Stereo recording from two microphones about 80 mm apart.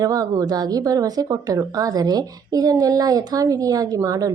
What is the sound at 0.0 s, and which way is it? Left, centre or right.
A woman's voice, right.